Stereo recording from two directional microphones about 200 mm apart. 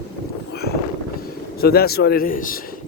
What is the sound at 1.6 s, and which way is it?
Speech, 50° left (ahead or behind).